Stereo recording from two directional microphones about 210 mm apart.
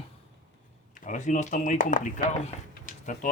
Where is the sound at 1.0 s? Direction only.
35° left (ahead or behind).